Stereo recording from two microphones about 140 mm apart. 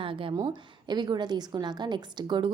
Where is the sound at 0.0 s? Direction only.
40° right (ahead or behind).